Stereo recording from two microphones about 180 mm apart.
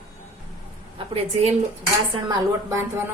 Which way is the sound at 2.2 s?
20° right (ahead or behind).